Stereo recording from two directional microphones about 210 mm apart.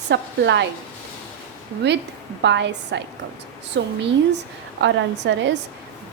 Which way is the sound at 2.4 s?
55° right (ahead or behind).